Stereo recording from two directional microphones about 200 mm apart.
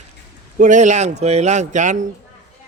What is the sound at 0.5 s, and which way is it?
Speech, 40° right (ahead or behind).